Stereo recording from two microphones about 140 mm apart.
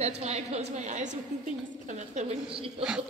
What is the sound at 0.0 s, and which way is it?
A woman's voice, 50° right (ahead or behind).